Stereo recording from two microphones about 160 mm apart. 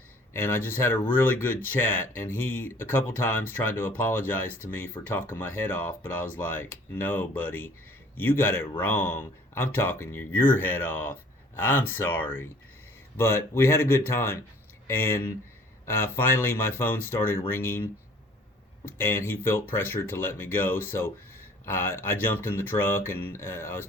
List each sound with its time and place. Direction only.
0.3 s speech: 15° left (ahead or behind)
18.9 s speech: 15° left (ahead or behind)